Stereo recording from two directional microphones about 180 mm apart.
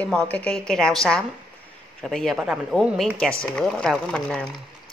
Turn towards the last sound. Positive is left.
turn(degrees=5)  # may be behind; listen again after turning